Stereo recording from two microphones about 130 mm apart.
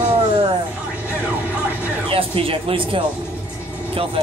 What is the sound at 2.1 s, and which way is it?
Speech, 45° right (ahead or behind).